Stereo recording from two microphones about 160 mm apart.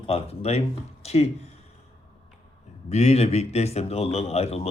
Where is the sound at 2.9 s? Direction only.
45° left (ahead or behind).